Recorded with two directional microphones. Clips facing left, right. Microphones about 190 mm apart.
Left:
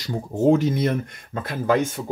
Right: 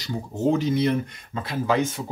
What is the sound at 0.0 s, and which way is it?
Speech, 50° left (ahead or behind).